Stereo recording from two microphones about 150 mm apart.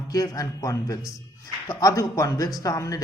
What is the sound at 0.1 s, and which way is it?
Speech, 25° left (ahead or behind).